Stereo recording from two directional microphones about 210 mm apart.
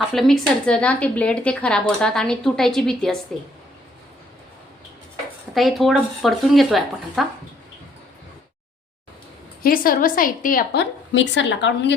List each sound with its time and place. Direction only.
0.1 s speech: centre (ahead or behind)
5.5 s speech: centre (ahead or behind)
9.6 s a woman's voice: 45° left (ahead or behind)
11.1 s a woman's voice: 60° left (ahead or behind)